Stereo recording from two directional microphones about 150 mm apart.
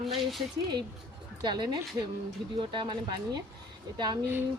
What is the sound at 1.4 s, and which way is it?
Speech, 30° right (ahead or behind).